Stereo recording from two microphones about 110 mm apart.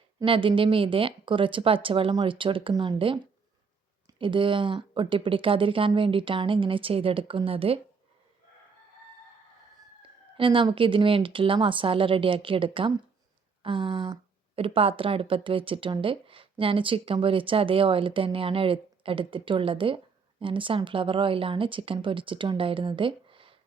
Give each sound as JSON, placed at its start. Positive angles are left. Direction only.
{"t": 0.3, "sound": "speech", "side_deg": -50}
{"t": 4.2, "sound": "speech", "side_deg": -50}
{"t": 10.0, "sound": "speech", "side_deg": -55}